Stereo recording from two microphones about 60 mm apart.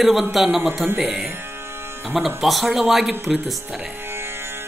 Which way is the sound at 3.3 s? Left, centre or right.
Right.